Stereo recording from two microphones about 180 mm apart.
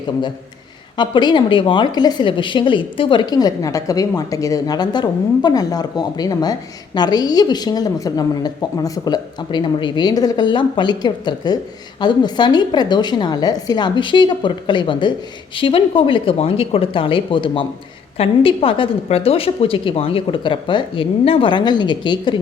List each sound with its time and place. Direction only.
0.9 s a woman's voice: 25° left (ahead or behind)